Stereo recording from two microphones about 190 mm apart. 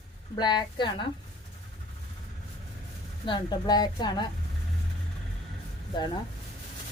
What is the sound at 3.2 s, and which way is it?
A woman's voice, 25° left (ahead or behind).